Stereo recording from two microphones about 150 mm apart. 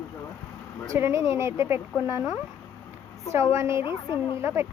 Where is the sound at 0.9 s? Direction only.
20° right (ahead or behind).